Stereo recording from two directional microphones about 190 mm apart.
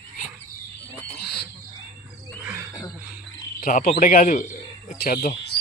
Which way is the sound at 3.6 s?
45° left (ahead or behind).